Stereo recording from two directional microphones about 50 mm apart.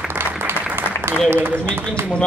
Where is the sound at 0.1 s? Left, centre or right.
Right.